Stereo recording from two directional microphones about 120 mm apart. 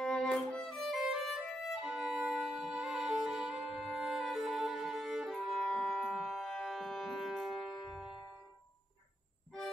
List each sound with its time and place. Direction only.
0.0 s violin: 5° left (ahead or behind)